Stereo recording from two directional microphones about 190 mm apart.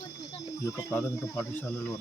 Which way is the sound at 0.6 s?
10° left (ahead or behind).